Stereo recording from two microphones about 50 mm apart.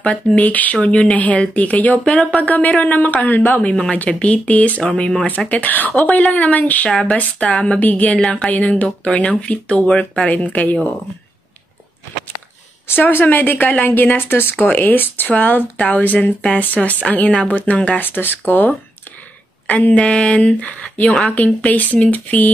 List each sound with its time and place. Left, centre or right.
0.4 s a woman's voice: left
4.1 s speech: left
5.5 s a woman's voice: left
6.9 s speech: centre; by 10.8 s left
12.8 s a woman's voice: left
17.3 s speech: left
18.0 s speech: left
19.7 s speech: left
21.0 s speech: left
21.3 s a woman's voice: left